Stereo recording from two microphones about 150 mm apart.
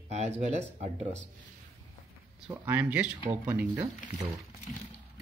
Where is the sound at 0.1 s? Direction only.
45° right (ahead or behind).